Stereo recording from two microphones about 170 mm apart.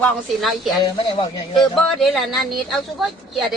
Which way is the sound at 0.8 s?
25° left (ahead or behind).